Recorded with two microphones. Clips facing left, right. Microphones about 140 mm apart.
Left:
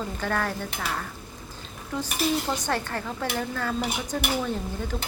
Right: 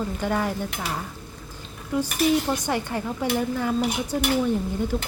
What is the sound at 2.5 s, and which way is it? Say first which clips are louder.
A woman's voice: right 2 dB; 15° right (ahead or behind).